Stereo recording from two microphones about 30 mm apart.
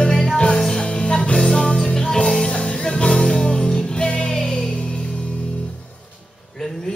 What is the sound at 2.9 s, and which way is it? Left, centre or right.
Music, left.